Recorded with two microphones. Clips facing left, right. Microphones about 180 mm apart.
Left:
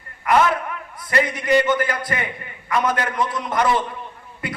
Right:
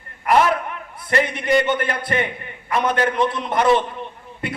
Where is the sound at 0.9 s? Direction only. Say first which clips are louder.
Right 1 dB; 25° right (ahead or behind).